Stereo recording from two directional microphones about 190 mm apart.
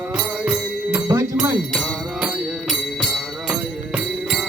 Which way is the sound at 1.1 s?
15° right (ahead or behind).